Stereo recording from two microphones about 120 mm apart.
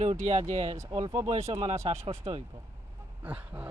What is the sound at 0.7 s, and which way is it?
A man's voice, 35° right (ahead or behind).